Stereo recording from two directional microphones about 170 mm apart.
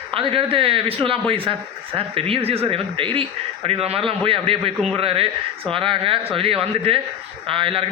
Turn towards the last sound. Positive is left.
turn(degrees=-30)  # may be behind; listen again after turning